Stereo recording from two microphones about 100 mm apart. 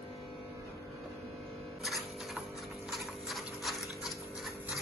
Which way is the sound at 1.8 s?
Centre (ahead or behind).